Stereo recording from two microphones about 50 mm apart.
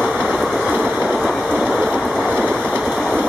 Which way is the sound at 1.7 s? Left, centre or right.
Right.